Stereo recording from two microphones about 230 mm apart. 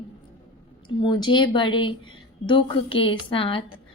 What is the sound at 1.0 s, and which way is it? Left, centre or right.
A woman's voice, centre.